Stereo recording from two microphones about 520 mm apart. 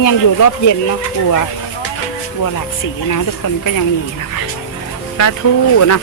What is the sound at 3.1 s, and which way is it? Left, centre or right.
Speech, left.